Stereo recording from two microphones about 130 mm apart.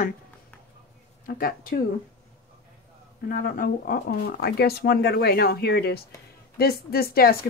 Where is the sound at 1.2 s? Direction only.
90° left.